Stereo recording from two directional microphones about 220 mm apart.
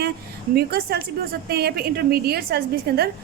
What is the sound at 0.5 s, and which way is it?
Speech, 45° right (ahead or behind).